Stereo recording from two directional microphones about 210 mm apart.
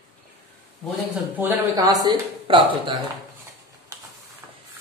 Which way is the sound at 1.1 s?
10° right (ahead or behind).